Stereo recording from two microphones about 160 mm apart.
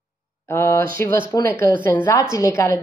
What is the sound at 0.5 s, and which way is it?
A woman's voice, 15° left (ahead or behind).